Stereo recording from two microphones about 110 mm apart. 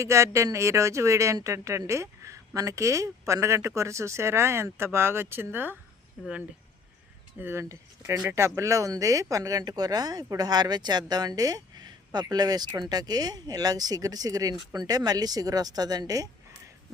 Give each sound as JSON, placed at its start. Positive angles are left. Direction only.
{"t": 0.0, "sound": "speech", "side_deg": -25}
{"t": 7.3, "sound": "speech", "side_deg": -20}